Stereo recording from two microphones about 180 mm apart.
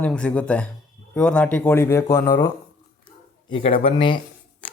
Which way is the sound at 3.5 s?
30° left (ahead or behind).